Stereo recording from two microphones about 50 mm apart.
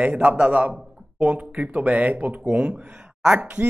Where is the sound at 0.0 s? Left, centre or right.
Right.